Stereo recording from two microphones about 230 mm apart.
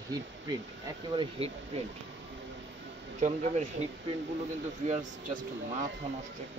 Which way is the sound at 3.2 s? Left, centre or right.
Right.